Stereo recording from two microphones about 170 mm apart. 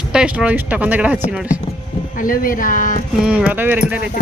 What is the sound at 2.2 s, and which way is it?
Speech, 55° left (ahead or behind).